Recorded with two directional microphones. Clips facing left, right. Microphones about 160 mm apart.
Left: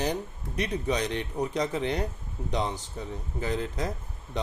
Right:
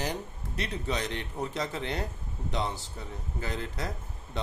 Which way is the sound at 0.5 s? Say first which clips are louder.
Left 5 dB; 15° left (ahead or behind).